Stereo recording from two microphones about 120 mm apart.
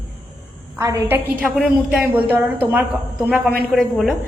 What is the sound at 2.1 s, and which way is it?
A woman's voice, 15° right (ahead or behind).